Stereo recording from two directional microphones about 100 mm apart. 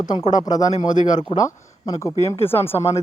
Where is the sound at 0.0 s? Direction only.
40° left (ahead or behind).